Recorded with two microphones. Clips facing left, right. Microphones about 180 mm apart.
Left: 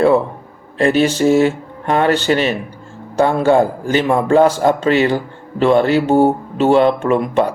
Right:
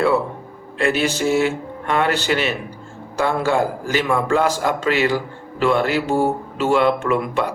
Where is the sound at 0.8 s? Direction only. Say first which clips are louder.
Left 6 dB; 35° left (ahead or behind).